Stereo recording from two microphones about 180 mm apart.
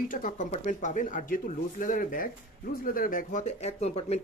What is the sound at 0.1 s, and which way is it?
Speech, 45° left (ahead or behind).